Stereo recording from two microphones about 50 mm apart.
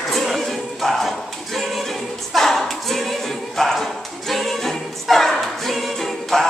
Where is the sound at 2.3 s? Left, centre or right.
Centre.